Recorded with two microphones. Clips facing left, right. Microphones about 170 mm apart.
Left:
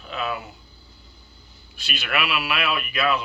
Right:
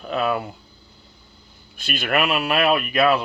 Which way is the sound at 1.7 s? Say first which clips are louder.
Right 6 dB; 50° right (ahead or behind).